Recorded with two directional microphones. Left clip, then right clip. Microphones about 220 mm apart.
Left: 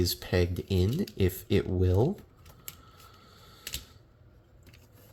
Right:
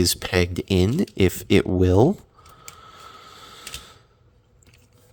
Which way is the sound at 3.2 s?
40° right (ahead or behind).